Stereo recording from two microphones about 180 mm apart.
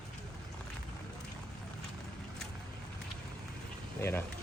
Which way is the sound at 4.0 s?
15° left (ahead or behind).